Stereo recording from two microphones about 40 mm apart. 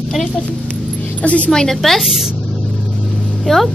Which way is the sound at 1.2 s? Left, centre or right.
Left.